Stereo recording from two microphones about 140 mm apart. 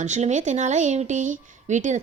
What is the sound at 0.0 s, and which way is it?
Speech, 55° right (ahead or behind).